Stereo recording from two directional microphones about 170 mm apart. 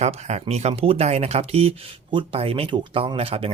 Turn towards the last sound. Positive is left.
turn(degrees=-35)  # may be behind; listen again after turning